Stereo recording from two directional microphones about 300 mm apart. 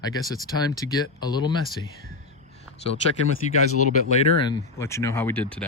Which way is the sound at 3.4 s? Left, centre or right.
Left.